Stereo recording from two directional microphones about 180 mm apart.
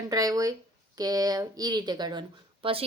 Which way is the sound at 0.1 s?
20° right (ahead or behind).